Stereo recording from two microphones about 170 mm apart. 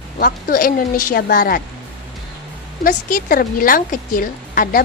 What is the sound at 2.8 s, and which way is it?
A woman's voice, 55° left (ahead or behind).